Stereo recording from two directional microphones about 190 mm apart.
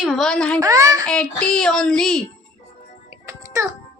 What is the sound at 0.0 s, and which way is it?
Speech, centre (ahead or behind).